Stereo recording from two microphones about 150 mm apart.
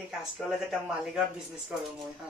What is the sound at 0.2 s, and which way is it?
Speech, centre (ahead or behind).